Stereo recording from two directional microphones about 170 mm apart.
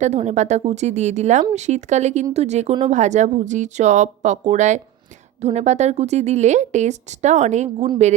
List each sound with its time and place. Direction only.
0.0 s speech: 40° right (ahead or behind)